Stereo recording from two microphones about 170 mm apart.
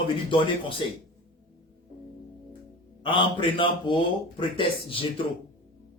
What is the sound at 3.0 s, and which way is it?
Speech, 30° left (ahead or behind).